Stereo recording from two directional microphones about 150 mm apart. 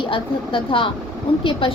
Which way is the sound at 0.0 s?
35° left (ahead or behind).